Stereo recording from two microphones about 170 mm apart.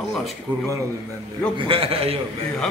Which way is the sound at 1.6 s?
35° right (ahead or behind).